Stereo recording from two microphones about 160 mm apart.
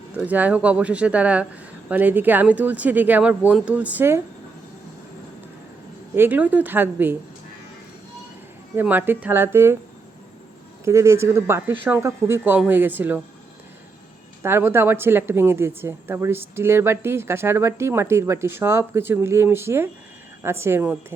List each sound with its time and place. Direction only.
0.2 s a woman's voice: 10° right (ahead or behind)
6.1 s a woman's voice: 10° right (ahead or behind)
8.7 s a woman's voice: 10° right (ahead or behind)
10.8 s a woman's voice: 20° right (ahead or behind)
14.4 s a woman's voice: 15° right (ahead or behind)